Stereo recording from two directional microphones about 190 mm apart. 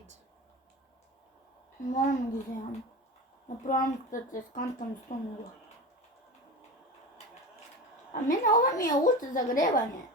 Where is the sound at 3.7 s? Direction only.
45° left (ahead or behind).